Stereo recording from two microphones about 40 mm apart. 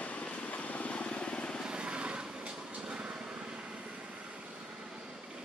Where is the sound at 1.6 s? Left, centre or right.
Right.